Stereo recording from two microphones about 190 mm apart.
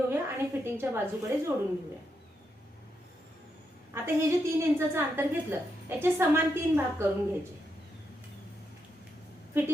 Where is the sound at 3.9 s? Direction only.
15° right (ahead or behind).